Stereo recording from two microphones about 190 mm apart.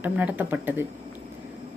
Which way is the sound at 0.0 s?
10° right (ahead or behind).